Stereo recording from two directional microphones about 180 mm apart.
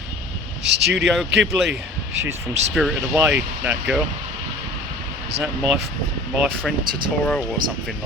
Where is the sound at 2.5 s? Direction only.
35° right (ahead or behind).